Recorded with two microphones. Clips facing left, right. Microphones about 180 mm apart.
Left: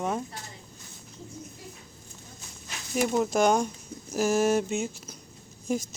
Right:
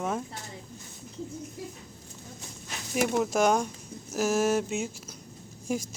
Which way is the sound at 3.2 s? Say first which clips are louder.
Left 2 dB; 5° right (ahead or behind).